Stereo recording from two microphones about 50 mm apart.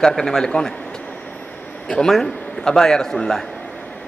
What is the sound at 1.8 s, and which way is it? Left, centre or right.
A man's voice, centre.